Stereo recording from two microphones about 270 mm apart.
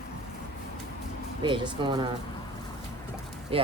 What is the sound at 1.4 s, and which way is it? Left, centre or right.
Speech, centre.